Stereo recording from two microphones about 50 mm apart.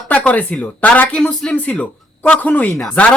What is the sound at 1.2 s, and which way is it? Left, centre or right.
Speech, centre.